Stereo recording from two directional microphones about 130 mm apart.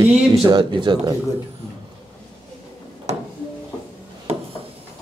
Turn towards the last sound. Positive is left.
turn(degrees=-50)  # may be behind; listen again after turning